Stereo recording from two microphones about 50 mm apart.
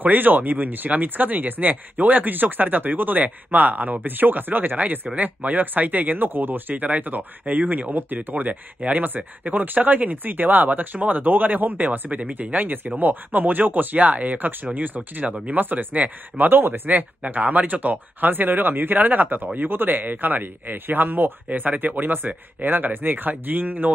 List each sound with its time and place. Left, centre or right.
0.0 s speech: right
15.3 s speech: right
15.6 s speech: right
16.9 s speech: right